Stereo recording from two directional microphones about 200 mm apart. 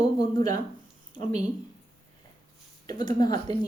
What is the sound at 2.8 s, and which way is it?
Speech, 20° left (ahead or behind).